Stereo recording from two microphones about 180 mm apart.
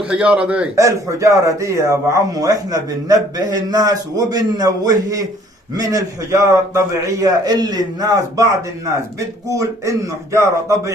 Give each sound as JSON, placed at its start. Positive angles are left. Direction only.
{"t": 0.0, "sound": "speech", "side_deg": -5}
{"t": 0.8, "sound": "a man's voice", "side_deg": -15}